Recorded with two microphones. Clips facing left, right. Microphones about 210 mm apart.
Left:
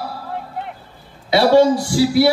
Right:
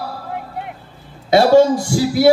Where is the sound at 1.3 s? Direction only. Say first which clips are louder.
Right 2 dB; 45° right (ahead or behind).